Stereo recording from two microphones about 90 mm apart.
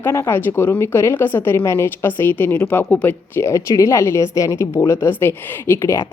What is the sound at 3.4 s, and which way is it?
A woman's voice, 35° left (ahead or behind).